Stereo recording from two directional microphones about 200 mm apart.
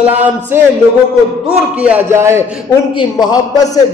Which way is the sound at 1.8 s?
10° right (ahead or behind).